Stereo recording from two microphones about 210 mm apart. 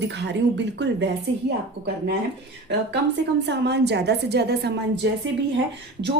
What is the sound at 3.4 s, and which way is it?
A woman's voice, 55° right (ahead or behind).